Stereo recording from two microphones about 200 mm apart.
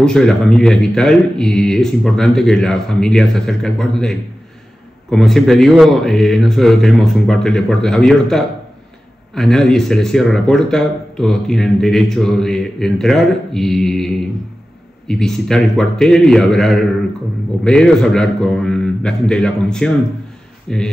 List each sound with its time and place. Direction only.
0.0 s speech: 5° left (ahead or behind)